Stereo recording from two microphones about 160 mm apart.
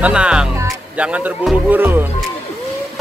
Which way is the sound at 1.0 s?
10° right (ahead or behind).